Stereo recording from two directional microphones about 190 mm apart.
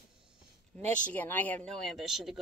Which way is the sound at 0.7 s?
5° left (ahead or behind).